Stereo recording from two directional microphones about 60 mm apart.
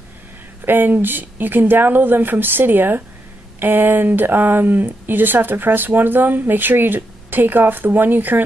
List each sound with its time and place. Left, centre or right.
0.7 s speech: right